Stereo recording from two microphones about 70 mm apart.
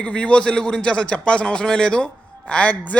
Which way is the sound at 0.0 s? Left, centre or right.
Centre.